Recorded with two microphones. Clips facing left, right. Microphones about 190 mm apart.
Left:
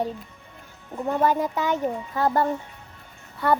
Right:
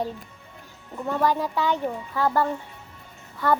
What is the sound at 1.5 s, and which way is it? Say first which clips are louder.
Speech: even; 45° left (ahead or behind).